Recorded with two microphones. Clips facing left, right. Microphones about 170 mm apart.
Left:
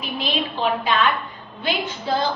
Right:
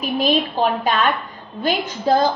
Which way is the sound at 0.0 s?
45° right (ahead or behind).